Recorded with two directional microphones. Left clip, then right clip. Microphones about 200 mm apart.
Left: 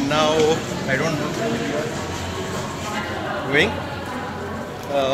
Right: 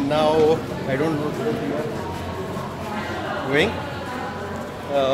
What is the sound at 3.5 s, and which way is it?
Speech, 15° right (ahead or behind).